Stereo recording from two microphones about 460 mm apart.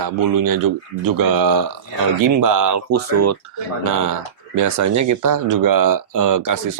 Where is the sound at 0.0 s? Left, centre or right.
Right.